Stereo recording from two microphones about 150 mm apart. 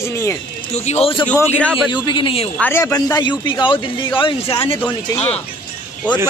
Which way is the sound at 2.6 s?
15° left (ahead or behind).